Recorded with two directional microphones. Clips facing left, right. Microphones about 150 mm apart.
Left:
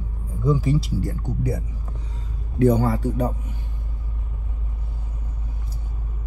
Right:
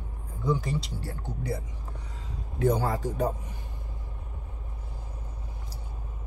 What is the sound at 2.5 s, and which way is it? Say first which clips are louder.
Speech: left 7 dB; 80° left.